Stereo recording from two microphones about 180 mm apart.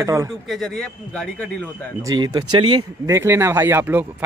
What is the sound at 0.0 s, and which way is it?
Speech, 15° right (ahead or behind).